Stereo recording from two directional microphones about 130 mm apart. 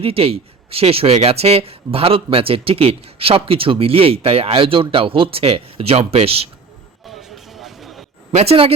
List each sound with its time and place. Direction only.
0.0 s speech: 45° right (ahead or behind)
7.1 s a sound: centre (ahead or behind)
8.3 s speech: 55° right (ahead or behind)